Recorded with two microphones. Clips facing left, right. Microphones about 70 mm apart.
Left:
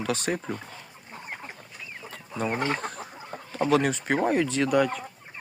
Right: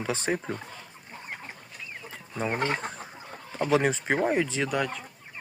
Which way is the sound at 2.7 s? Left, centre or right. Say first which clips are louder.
Left 1 dB; centre.